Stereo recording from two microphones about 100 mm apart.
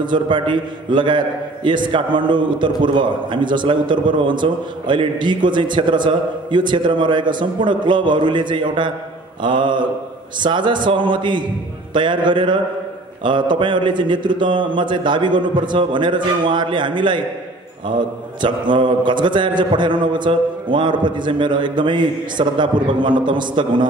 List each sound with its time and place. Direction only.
0.0 s a man's voice: 55° right (ahead or behind)